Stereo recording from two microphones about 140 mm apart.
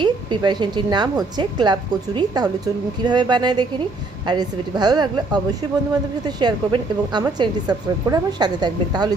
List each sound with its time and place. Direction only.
0.0 s a woman's voice: 30° right (ahead or behind)